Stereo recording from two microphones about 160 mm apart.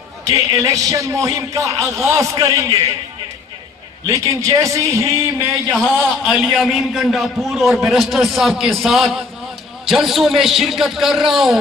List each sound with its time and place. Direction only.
0.2 s a man's voice: 20° right (ahead or behind)
4.0 s a man's voice: 20° right (ahead or behind)
5.7 s a man's voice: centre (ahead or behind)